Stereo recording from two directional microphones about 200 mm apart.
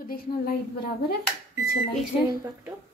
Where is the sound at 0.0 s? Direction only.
50° left (ahead or behind).